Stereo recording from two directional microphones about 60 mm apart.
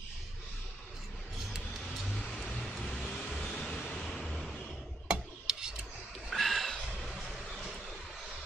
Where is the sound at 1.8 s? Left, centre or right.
Centre.